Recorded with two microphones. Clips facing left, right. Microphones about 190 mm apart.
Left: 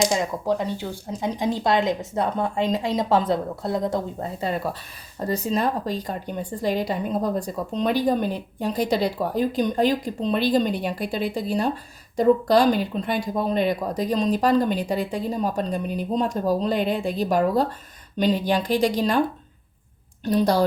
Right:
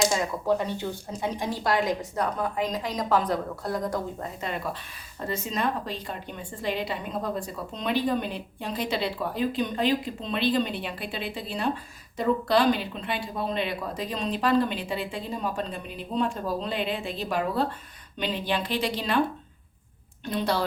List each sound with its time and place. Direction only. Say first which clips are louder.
0.0 s a woman's voice: left 3 dB; 15° left (ahead or behind); by 19.2 s 40° left (ahead or behind)
20.2 s speech: left 7 dB; 40° left (ahead or behind)